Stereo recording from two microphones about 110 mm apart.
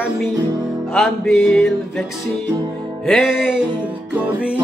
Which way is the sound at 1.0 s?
5° left (ahead or behind).